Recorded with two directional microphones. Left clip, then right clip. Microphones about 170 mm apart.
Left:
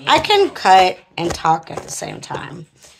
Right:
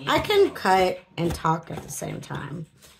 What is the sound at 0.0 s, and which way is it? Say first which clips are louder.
Speech: left 7 dB; 30° right (ahead or behind).